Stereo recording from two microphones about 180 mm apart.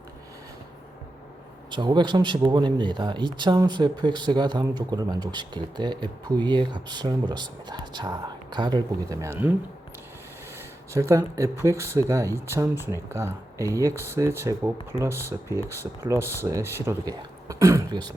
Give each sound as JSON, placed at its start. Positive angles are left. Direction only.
{"t": 1.7, "sound": "speech", "side_deg": -25}
{"t": 10.9, "sound": "speech", "side_deg": -15}